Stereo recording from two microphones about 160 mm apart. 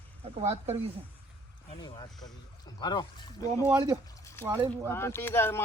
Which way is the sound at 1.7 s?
30° left (ahead or behind).